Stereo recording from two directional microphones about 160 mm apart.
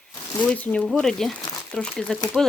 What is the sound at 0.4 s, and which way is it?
Speech, 5° left (ahead or behind).